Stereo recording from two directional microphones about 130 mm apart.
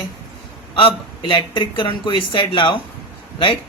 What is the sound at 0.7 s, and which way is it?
Speech, 40° left (ahead or behind).